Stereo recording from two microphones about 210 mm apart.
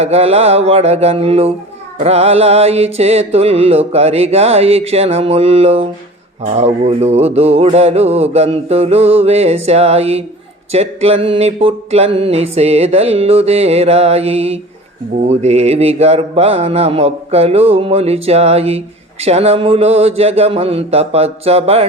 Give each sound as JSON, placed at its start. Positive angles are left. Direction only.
{"t": 0.0, "sound": "mantra", "side_deg": -30}